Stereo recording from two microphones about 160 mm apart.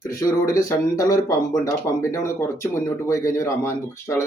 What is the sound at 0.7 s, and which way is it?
Speech, 20° left (ahead or behind).